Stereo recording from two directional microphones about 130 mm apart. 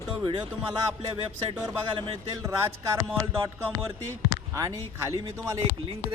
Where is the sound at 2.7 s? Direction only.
20° right (ahead or behind).